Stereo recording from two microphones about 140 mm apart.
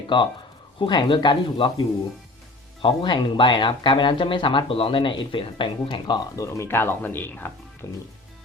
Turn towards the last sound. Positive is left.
turn(degrees=20)  # may be behind; listen again after turning